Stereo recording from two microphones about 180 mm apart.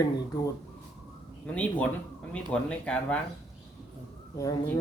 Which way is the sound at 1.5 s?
5° left (ahead or behind).